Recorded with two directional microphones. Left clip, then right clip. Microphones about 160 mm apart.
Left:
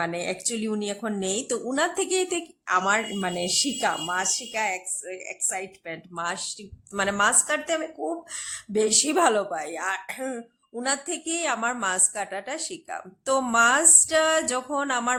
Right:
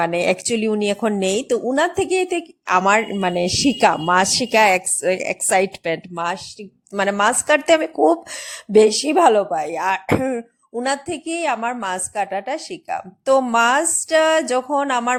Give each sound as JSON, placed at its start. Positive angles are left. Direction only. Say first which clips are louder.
{"t": 0.0, "sound": "a woman's voice", "louder": "right 10 dB", "side_deg": -35}
{"t": 2.6, "sound": "a woman's voice", "louder": "right 7 dB", "side_deg": -35}
{"t": 6.1, "sound": "a woman's voice", "louder": "right 6 dB", "side_deg": -30}
{"t": 8.9, "sound": "a woman's voice", "louder": "right 7 dB", "side_deg": -20}
{"t": 10.8, "sound": "a woman's voice", "louder": "right 5 dB", "side_deg": -20}